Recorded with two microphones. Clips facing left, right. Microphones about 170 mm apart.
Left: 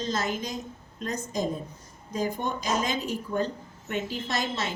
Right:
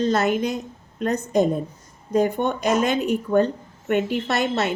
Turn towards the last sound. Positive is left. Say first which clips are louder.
# right 8 dB
turn(degrees=-65)  # may be behind; listen again after turning